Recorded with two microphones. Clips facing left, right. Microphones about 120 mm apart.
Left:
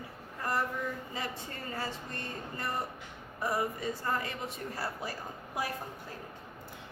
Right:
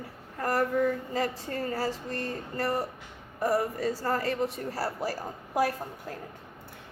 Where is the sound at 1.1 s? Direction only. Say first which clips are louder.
Right 8 dB; 45° right (ahead or behind).